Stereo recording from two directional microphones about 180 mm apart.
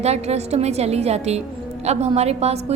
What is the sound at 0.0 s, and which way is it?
A woman's voice, 35° right (ahead or behind).